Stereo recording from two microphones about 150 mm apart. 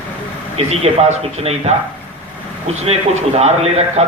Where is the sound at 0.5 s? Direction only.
45° right (ahead or behind).